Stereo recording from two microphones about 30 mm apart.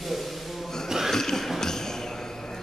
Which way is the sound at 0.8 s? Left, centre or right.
Centre.